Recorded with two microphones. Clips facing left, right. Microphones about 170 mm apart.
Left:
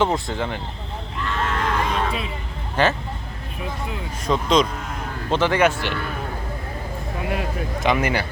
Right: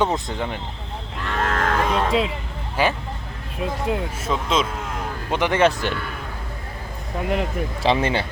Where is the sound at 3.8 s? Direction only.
70° right (ahead or behind).